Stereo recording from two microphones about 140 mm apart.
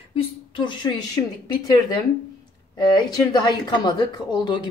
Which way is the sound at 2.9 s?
30° left (ahead or behind).